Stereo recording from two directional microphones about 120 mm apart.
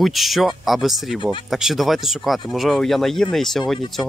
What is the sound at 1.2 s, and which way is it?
Speech, 40° left (ahead or behind).